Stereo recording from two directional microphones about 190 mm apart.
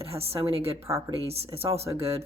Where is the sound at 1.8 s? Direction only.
15° right (ahead or behind).